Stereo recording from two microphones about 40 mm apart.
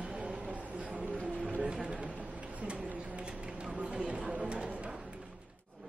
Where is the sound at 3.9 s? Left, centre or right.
Right.